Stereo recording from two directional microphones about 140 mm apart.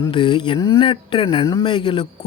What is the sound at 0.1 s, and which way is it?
Speech, 35° left (ahead or behind).